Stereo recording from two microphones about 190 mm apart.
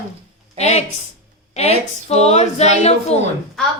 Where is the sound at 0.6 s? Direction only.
35° left (ahead or behind).